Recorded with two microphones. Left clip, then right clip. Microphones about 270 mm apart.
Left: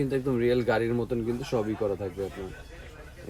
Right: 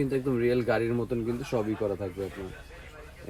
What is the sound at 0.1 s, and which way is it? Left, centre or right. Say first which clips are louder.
Speech: left 1 dB; centre.